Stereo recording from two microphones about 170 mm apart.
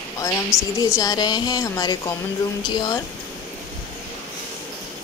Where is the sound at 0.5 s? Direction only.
5° right (ahead or behind).